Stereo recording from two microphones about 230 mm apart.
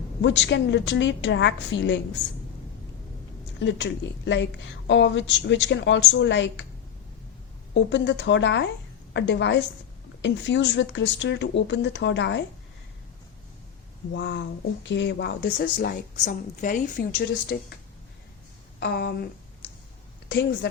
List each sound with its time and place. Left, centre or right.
0.2 s a woman's voice: left
3.6 s a woman's voice: left
7.7 s a woman's voice: left
14.1 s a woman's voice: left
17.5 s a woman's voice: left
18.8 s a woman's voice: left
20.2 s a woman's voice: left